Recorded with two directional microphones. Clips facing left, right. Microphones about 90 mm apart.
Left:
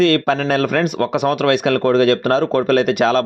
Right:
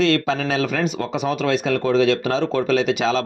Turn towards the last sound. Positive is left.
turn(degrees=55)  # may be behind; listen again after turning